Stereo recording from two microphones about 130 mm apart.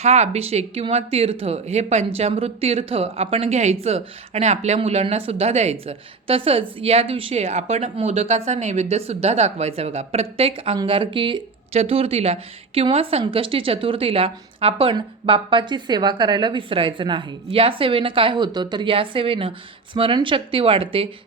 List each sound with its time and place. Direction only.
0.0 s speech: 55° right (ahead or behind); by 11.4 s 40° right (ahead or behind)
11.7 s speech: 50° right (ahead or behind)